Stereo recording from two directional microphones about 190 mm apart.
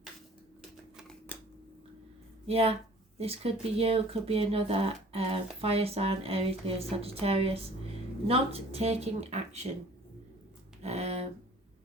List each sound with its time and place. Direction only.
1.3 s scissors: 10° left (ahead or behind)
2.5 s speech: 30° right (ahead or behind)
10.8 s a sound: 35° right (ahead or behind)